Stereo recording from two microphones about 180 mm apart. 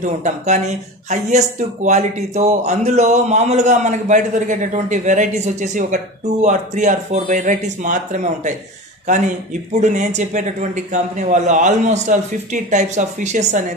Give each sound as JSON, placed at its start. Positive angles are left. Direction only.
{"t": 0.0, "sound": "speech", "side_deg": -40}